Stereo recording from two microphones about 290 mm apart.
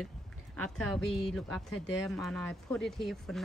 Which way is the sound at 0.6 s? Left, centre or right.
Centre.